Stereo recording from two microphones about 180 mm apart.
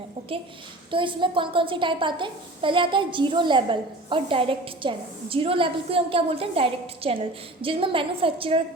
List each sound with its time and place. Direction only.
0.9 s a woman's voice: 30° right (ahead or behind)